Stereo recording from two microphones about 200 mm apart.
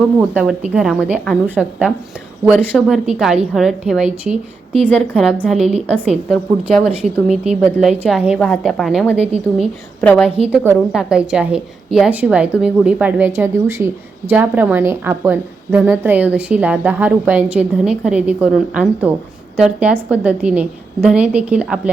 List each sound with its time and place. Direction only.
0.7 s a woman's voice: 5° right (ahead or behind)
5.5 s a woman's voice: 30° right (ahead or behind)
6.2 s a woman's voice: centre (ahead or behind)
9.1 s a woman's voice: 30° right (ahead or behind)
9.6 s a woman's voice: 5° left (ahead or behind)
10.6 s a woman's voice: 5° right (ahead or behind)